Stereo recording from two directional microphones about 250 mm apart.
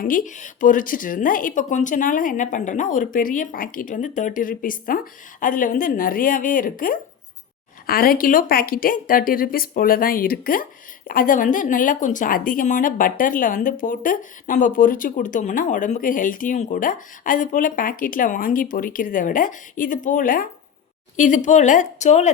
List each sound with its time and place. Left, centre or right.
0.0 s speech: left